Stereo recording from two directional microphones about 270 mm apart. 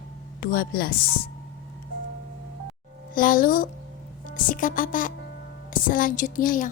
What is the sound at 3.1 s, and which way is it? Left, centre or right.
A woman's voice, left.